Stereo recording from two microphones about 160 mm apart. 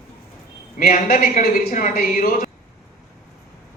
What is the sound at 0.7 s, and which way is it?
A woman's voice, 60° left (ahead or behind).